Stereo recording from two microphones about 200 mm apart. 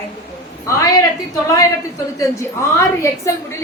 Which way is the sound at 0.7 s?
15° left (ahead or behind).